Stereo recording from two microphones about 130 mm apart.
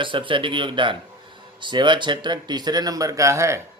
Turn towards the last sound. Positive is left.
turn(degrees=-20)  # may be behind; listen again after turning